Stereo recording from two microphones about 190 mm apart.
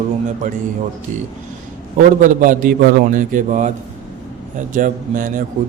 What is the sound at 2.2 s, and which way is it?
A man's voice, 45° right (ahead or behind).